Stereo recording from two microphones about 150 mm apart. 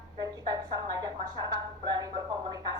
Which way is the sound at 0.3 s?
30° right (ahead or behind).